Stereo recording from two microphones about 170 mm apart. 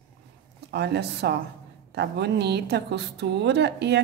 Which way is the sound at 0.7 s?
80° right.